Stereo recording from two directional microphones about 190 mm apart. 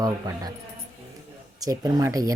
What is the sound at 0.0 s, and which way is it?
Speech, 20° right (ahead or behind).